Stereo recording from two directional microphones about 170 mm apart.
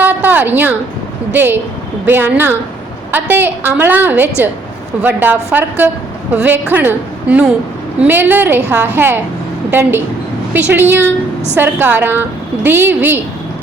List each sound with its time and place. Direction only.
0.0 s a sound: 10° right (ahead or behind)
1.3 s a woman's voice: 10° right (ahead or behind)
10.5 s a woman's voice: 10° right (ahead or behind)